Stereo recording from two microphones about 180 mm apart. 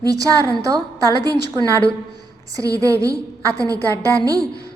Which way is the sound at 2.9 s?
15° right (ahead or behind).